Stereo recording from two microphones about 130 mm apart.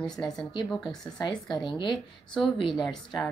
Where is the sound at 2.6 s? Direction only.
40° left (ahead or behind).